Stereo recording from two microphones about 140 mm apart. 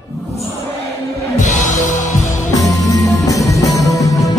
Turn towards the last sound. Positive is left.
turn(degrees=25)  # may be behind; listen again after turning